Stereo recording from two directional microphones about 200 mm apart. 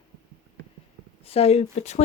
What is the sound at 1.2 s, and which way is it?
Speech, 30° left (ahead or behind).